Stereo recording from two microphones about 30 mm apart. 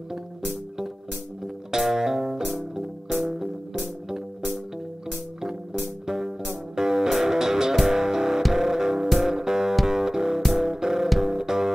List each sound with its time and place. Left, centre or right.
1.8 s music: centre
3.1 s music: centre
5.4 s music: centre